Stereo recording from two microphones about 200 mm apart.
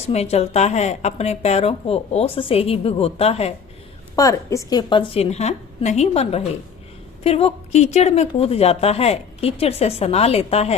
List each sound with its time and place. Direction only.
0.1 s speech: 30° left (ahead or behind)
4.1 s a woman's voice: 15° left (ahead or behind); by 10.8 s 30° left (ahead or behind)